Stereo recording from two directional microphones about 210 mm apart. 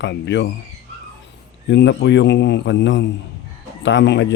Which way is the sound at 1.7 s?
55° left (ahead or behind).